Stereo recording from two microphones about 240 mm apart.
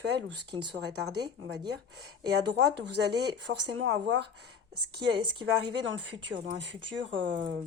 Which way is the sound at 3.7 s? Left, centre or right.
Right.